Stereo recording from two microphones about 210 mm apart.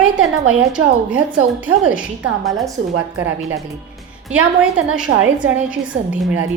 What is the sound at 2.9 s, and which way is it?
Speech, 75° right (ahead or behind).